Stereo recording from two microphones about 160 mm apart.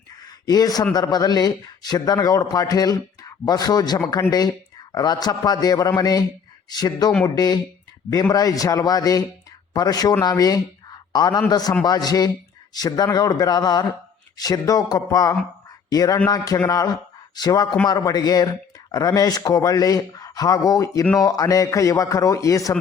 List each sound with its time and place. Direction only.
0.4 s speech: 25° left (ahead or behind)